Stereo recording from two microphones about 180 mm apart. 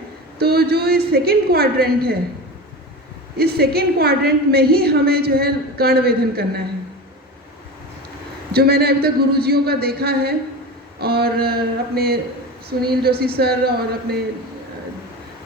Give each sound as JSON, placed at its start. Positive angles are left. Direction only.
{"t": 0.3, "sound": "a woman's voice", "side_deg": -60}
{"t": 3.3, "sound": "a woman's voice", "side_deg": -60}
{"t": 8.5, "sound": "a woman's voice", "side_deg": -60}